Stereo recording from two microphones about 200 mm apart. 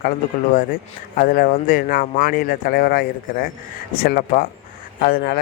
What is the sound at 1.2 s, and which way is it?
Speech, 45° left (ahead or behind).